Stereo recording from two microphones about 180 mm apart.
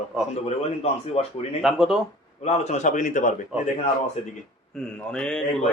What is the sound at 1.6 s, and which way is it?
Speech, centre (ahead or behind).